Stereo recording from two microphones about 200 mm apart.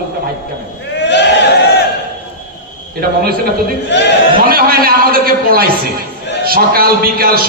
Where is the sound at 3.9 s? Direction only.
60° left (ahead or behind).